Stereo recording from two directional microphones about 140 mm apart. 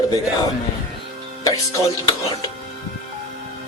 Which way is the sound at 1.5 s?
25° left (ahead or behind).